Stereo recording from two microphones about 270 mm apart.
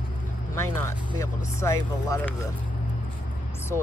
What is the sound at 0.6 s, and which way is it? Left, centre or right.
Speech, centre.